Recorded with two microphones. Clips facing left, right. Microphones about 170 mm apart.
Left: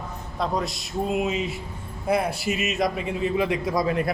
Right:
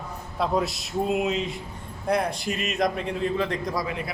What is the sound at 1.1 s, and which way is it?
A man's voice, centre (ahead or behind).